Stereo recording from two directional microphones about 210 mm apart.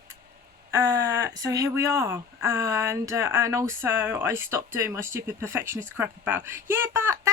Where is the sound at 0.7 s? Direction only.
15° right (ahead or behind).